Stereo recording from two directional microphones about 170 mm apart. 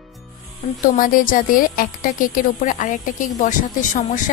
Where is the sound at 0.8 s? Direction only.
55° left (ahead or behind).